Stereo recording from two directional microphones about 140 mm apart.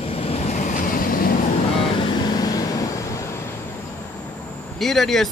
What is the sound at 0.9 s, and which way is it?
Vehicle, 85° left.